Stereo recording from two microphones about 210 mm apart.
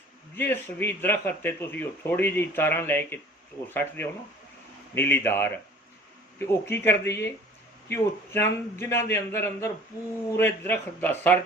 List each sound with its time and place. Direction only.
0.3 s a man's voice: 10° left (ahead or behind)